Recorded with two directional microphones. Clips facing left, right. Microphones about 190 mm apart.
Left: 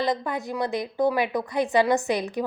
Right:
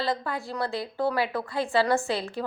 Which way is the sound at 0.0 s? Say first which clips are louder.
Left 3 dB; 20° left (ahead or behind).